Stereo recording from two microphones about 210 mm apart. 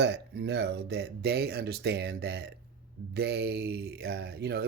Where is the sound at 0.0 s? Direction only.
50° right (ahead or behind).